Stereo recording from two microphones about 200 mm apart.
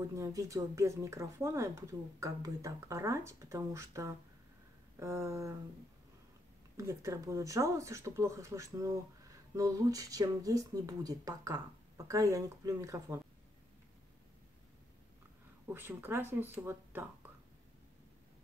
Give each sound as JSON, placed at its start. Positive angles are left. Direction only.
{"t": 0.1, "sound": "speech", "side_deg": -15}
{"t": 6.8, "sound": "speech", "side_deg": -15}
{"t": 15.7, "sound": "speech", "side_deg": -10}